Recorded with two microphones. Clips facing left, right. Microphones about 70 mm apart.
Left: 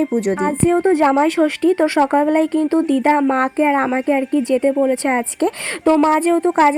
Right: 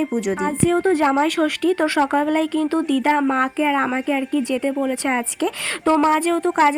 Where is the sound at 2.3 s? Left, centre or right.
Left.